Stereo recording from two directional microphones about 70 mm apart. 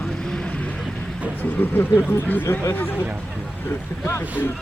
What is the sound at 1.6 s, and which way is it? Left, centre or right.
Speech, left.